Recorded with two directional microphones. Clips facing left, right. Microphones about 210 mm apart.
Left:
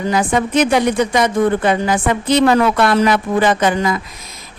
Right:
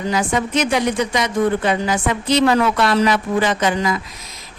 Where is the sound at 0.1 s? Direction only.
55° left (ahead or behind).